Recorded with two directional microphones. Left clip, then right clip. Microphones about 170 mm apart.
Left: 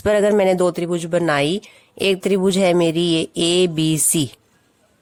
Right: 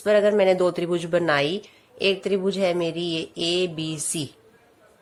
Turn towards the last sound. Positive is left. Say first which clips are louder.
# left 10 dB
turn(degrees=60)  # may be behind; listen again after turning